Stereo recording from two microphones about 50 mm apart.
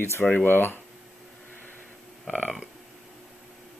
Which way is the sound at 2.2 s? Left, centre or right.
Centre.